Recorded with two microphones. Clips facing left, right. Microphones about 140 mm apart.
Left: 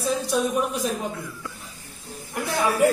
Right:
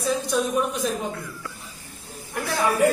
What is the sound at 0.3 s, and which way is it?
Speech, centre (ahead or behind).